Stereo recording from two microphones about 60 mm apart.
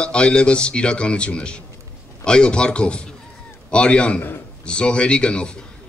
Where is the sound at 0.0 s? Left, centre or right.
Centre.